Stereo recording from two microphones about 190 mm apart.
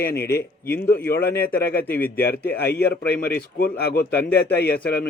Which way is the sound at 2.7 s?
55° left (ahead or behind).